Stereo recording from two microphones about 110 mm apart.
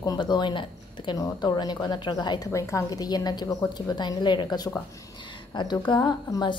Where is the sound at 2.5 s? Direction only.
30° left (ahead or behind).